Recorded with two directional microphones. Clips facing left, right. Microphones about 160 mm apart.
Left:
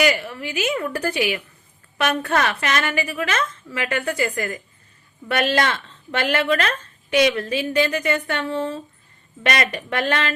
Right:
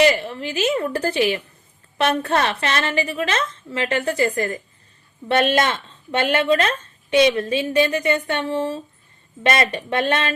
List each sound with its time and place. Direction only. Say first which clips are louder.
0.0 s a woman's voice: right 3 dB; 30° right (ahead or behind)